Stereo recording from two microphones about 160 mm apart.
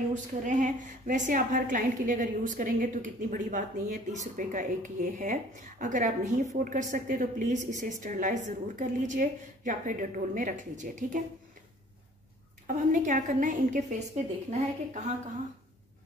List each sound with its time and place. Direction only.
0.3 s a woman's voice: 50° right (ahead or behind)
12.6 s a woman's voice: 55° right (ahead or behind)